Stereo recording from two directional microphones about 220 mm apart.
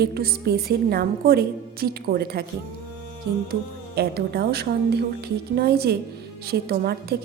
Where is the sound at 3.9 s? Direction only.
45° right (ahead or behind).